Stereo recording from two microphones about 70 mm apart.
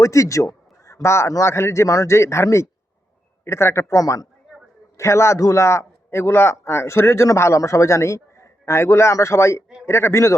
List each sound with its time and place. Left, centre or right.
0.0 s a man's voice: left
4.9 s a man's voice: left